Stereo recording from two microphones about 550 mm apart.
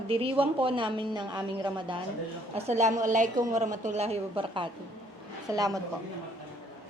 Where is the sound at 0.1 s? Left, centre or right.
Centre.